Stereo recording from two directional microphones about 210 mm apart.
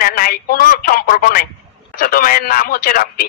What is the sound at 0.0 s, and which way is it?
Speech, 40° left (ahead or behind).